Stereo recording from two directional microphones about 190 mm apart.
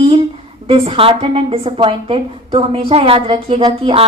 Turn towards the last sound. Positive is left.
turn(degrees=-25)  # may be behind; listen again after turning